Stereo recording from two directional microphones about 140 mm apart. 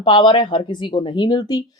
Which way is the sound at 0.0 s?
35° left (ahead or behind).